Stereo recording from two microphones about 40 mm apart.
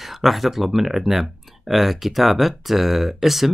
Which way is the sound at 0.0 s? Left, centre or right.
Centre.